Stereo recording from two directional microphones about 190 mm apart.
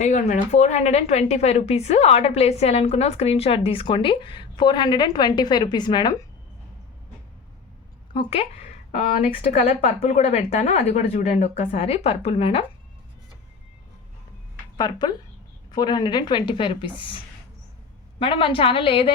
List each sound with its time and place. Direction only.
0.0 s a woman's voice: 40° left (ahead or behind); by 6.1 s 20° left (ahead or behind)
8.1 s a sound: 30° left (ahead or behind)
9.2 s a woman's voice: 30° left (ahead or behind)
14.8 s a woman's voice: 20° left (ahead or behind)
18.2 s a woman's voice: 30° left (ahead or behind)